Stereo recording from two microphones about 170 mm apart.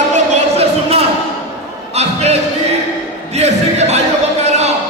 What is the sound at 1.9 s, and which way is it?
Music, 40° right (ahead or behind).